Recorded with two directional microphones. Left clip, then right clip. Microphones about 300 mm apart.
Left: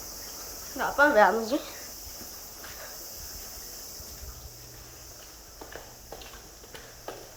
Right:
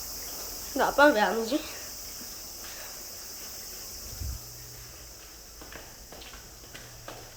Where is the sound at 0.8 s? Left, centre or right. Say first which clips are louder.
Right 2 dB; centre.